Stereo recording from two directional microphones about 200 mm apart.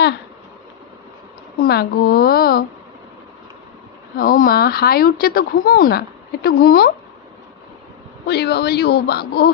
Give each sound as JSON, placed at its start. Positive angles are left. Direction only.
{"t": 1.6, "sound": "speech", "side_deg": 50}
{"t": 4.2, "sound": "speech", "side_deg": 45}
{"t": 8.3, "sound": "speech", "side_deg": 55}